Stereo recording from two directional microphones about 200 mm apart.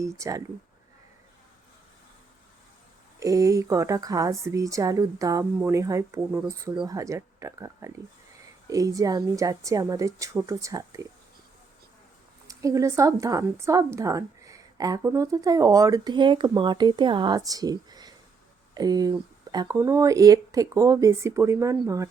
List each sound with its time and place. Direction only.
0.0 s a woman's voice: 15° right (ahead or behind)
3.2 s a woman's voice: 15° right (ahead or behind)
12.5 s a woman's voice: 15° right (ahead or behind)